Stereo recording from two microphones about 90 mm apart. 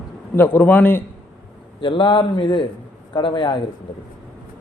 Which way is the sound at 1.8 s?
70° left (ahead or behind).